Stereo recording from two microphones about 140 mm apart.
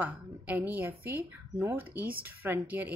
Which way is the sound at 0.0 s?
10° right (ahead or behind).